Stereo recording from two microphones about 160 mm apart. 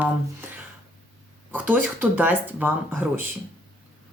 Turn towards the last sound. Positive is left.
turn(degrees=-10)  # may be behind; listen again after turning